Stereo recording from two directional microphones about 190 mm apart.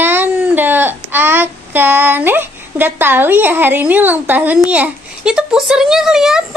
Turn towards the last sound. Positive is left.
turn(degrees=-5)  # may be behind; listen again after turning